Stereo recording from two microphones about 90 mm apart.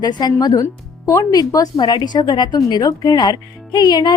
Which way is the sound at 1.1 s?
40° left (ahead or behind).